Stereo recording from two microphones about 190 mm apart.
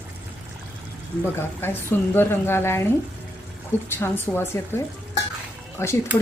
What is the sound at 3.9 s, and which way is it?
Speech, 10° left (ahead or behind).